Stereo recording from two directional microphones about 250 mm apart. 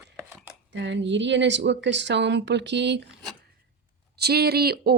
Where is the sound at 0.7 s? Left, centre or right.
Right.